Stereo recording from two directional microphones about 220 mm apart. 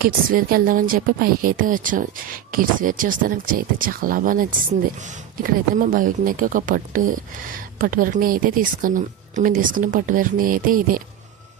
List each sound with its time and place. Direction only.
0.0 s speech: 40° right (ahead or behind)